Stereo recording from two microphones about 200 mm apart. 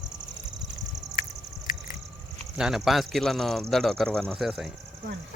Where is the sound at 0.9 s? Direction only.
20° right (ahead or behind).